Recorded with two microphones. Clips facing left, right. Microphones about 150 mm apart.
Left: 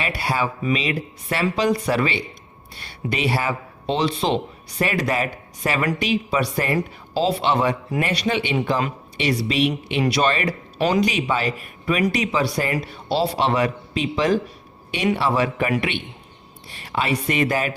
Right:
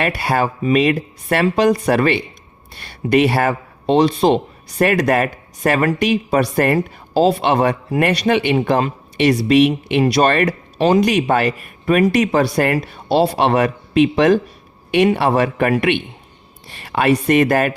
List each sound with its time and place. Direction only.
0.0 s a man's voice: 50° right (ahead or behind)
10.0 s a man's voice: 40° right (ahead or behind)
10.8 s speech: 25° right (ahead or behind)
11.0 s a man's voice: 50° right (ahead or behind)
16.7 s a man's voice: 60° right (ahead or behind)